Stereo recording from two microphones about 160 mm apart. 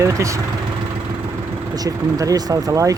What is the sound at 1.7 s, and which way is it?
Speech, 20° right (ahead or behind).